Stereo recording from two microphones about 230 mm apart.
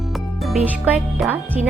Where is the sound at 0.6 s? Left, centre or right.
Centre.